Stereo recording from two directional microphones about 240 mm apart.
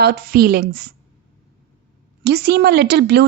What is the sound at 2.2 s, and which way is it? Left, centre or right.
A woman's voice, right.